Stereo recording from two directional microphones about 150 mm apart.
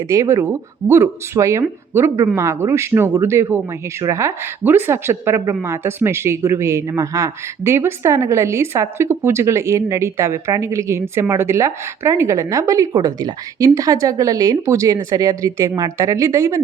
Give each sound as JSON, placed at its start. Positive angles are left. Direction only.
{"t": 0.1, "sound": "speech", "side_deg": -20}